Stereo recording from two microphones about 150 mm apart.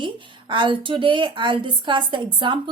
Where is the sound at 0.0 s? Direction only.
35° right (ahead or behind).